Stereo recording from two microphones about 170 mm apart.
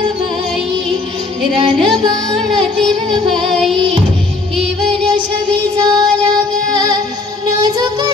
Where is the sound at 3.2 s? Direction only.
Centre (ahead or behind).